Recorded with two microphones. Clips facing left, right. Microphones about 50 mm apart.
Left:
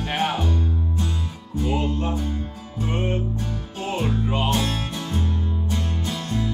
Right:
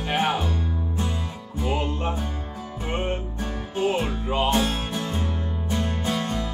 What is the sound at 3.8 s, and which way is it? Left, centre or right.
Music, centre.